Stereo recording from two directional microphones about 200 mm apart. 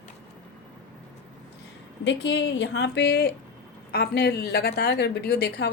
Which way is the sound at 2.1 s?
65° left (ahead or behind).